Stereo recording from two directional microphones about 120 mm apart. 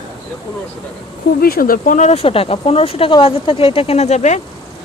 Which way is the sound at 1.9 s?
80° left.